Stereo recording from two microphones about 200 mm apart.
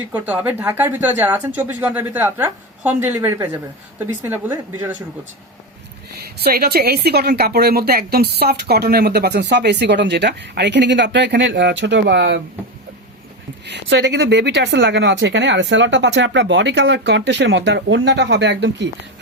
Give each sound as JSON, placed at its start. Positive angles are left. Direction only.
{"t": 0.1, "sound": "a woman's voice", "side_deg": -10}
{"t": 6.4, "sound": "a woman's voice", "side_deg": -50}
{"t": 13.7, "sound": "a woman's voice", "side_deg": -60}